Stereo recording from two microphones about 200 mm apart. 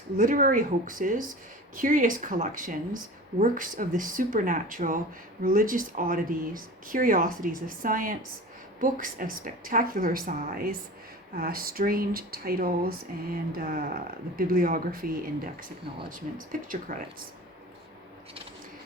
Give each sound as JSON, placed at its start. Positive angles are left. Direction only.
{"t": 0.2, "sound": "speech", "side_deg": -45}
{"t": 16.5, "sound": "speech", "side_deg": -40}